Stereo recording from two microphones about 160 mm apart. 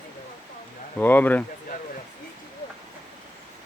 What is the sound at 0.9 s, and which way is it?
Speech, 10° left (ahead or behind).